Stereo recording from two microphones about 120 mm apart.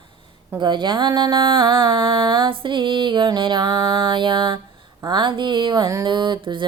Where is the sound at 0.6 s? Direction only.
40° right (ahead or behind).